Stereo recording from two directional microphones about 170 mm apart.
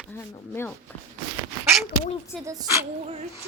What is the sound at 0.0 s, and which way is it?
Speech, 15° left (ahead or behind).